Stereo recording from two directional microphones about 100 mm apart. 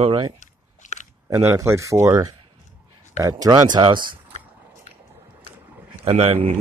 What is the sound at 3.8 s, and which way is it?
Speech, 50° right (ahead or behind).